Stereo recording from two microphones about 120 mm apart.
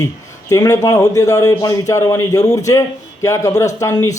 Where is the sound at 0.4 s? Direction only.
30° left (ahead or behind).